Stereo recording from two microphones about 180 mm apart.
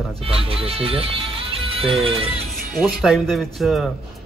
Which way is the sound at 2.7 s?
Centre (ahead or behind).